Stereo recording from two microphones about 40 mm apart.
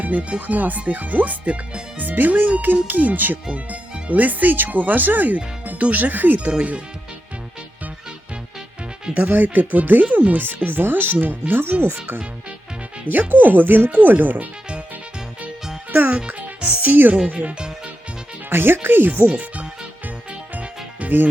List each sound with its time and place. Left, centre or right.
0.0 s speech: right
6.4 s speech: right
9.1 s speech: right
11.7 s speech: right
13.1 s speech: right
16.0 s music: right
16.8 s speech: right
17.2 s speech: right
18.4 s speech: right
19.3 s speech: right
20.5 s music: right